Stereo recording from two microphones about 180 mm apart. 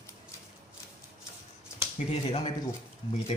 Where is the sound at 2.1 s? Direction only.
30° left (ahead or behind).